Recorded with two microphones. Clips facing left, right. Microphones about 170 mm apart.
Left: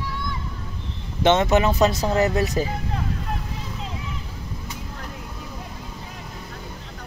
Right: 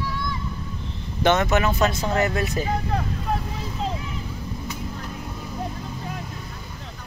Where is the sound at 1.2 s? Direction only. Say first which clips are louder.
Left 2 dB; 30° left (ahead or behind).